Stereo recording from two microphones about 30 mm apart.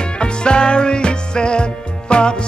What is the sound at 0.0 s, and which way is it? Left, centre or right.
Music, left.